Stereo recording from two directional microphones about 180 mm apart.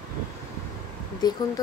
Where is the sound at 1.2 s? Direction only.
20° left (ahead or behind).